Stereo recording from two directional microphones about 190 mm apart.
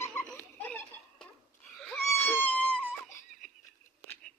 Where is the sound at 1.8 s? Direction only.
5° left (ahead or behind).